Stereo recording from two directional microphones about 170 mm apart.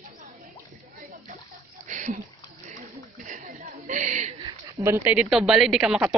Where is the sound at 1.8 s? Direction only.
45° right (ahead or behind).